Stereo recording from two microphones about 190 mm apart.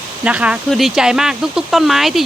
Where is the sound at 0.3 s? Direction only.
5° right (ahead or behind).